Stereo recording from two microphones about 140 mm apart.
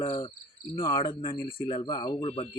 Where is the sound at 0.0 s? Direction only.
40° left (ahead or behind).